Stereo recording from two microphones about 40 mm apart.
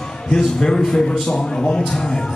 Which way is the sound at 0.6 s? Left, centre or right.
Centre.